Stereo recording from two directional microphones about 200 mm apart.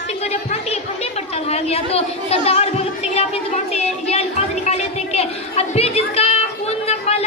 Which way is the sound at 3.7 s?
30° left (ahead or behind).